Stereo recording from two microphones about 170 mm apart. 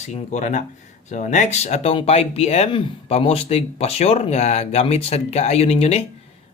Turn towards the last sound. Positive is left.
turn(degrees=35)  # may be behind; listen again after turning